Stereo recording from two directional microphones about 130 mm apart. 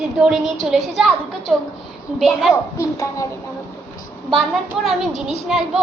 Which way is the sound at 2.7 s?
25° left (ahead or behind).